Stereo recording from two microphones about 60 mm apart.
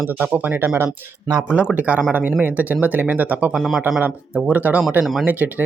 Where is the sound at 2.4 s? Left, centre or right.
Right.